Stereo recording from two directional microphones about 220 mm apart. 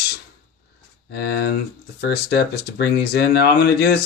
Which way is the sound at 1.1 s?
45° left (ahead or behind).